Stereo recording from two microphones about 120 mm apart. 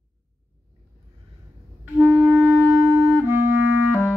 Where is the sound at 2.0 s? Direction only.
15° right (ahead or behind).